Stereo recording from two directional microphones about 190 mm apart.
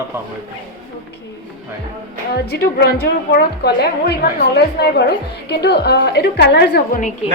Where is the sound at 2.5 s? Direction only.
60° left (ahead or behind).